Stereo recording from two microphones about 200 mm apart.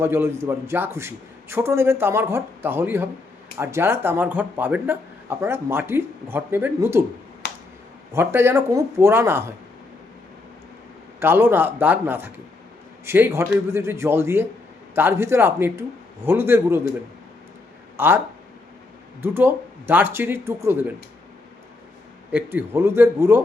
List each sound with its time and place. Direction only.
0.0 s speech: 10° right (ahead or behind)
7.4 s a sound: 50° left (ahead or behind)
8.1 s speech: 10° right (ahead or behind)
11.2 s speech: 10° right (ahead or behind)
17.9 s speech: 10° right (ahead or behind)
19.2 s speech: 10° right (ahead or behind)
22.3 s speech: 10° right (ahead or behind)